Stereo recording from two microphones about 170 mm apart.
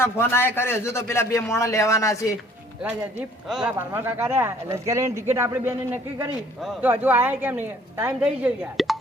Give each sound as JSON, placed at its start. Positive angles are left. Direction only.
{"t": 0.0, "sound": "a man's voice", "side_deg": 15}
{"t": 2.8, "sound": "a woman's voice", "side_deg": -5}
{"t": 6.6, "sound": "a woman's voice", "side_deg": 0}